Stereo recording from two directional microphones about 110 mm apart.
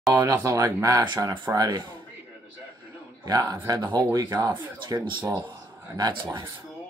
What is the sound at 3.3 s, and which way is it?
Speech, 30° right (ahead or behind).